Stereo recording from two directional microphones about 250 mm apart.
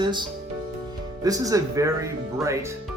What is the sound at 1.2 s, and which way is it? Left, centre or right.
Speech, centre.